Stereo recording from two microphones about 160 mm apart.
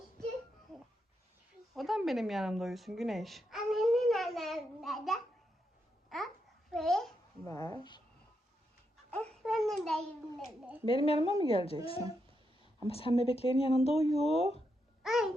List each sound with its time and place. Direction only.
1.7 s a sound: centre (ahead or behind)
6.1 s babbling: centre (ahead or behind)
7.4 s speech: 25° left (ahead or behind)
9.0 s a sound: 5° left (ahead or behind)
10.3 s speech: centre (ahead or behind)
10.8 s speech: 35° left (ahead or behind)
12.9 s speech: 35° left (ahead or behind)
15.0 s babbling: 5° right (ahead or behind)